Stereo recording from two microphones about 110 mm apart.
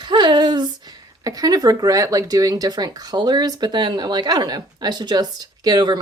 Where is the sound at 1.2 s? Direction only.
35° right (ahead or behind).